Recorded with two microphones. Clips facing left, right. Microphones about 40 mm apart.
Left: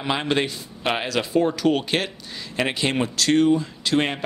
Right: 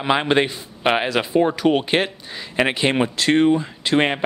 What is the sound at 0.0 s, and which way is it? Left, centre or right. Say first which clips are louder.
A man's voice: right 5 dB; right.